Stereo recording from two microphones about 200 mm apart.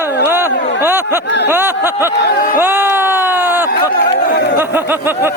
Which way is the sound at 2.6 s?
10° right (ahead or behind).